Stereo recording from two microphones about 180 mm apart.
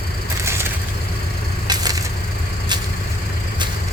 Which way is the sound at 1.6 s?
20° right (ahead or behind).